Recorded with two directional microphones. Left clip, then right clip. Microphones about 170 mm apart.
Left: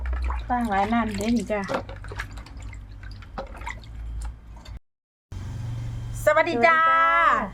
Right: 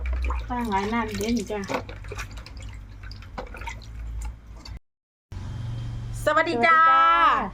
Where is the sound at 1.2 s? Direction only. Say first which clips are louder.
Left 2 dB; 45° left (ahead or behind).